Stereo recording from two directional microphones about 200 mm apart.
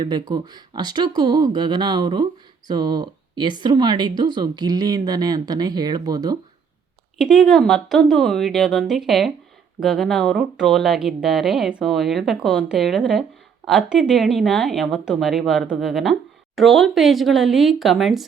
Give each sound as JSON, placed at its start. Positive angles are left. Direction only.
{"t": 0.0, "sound": "speech", "side_deg": -20}
{"t": 7.2, "sound": "speech", "side_deg": 0}